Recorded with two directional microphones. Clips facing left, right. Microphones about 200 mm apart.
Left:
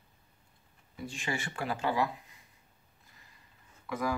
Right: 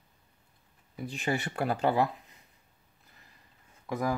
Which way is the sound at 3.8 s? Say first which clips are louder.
Right 2 dB; 40° right (ahead or behind).